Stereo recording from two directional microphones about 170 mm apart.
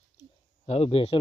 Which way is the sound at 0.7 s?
35° left (ahead or behind).